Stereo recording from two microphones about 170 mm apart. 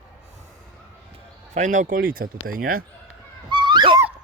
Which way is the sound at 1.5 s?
45° right (ahead or behind).